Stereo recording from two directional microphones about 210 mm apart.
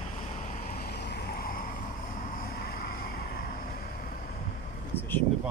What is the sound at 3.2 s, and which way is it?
Vehicle, 45° left (ahead or behind).